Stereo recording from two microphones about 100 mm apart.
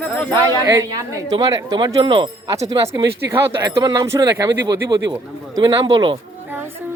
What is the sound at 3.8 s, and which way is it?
Speech, 45° right (ahead or behind).